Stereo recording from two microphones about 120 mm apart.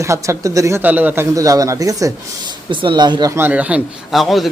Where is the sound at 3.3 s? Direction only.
15° right (ahead or behind).